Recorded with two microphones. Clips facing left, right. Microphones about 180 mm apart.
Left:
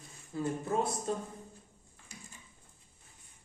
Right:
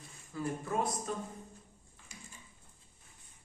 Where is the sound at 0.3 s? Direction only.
25° left (ahead or behind).